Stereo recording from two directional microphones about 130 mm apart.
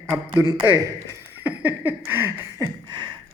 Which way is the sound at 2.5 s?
35° right (ahead or behind).